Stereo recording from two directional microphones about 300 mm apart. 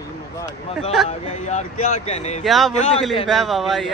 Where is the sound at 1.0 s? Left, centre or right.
Left.